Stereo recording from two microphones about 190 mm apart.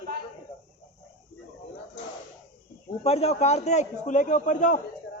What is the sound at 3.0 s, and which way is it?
A man's voice, 30° left (ahead or behind).